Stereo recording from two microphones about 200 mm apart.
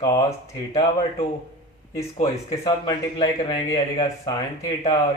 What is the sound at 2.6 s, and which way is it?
Speech, 20° left (ahead or behind).